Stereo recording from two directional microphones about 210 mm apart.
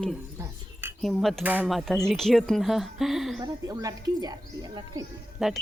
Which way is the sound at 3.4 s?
15° right (ahead or behind).